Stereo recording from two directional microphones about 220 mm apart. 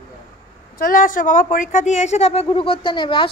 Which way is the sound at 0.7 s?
40° left (ahead or behind).